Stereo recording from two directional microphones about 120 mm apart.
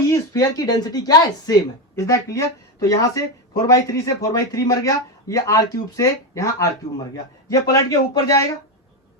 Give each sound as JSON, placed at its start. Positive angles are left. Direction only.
{"t": 0.1, "sound": "speech", "side_deg": 30}